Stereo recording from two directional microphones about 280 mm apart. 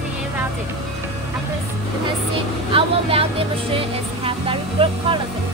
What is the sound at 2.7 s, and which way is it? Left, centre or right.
Speech, centre.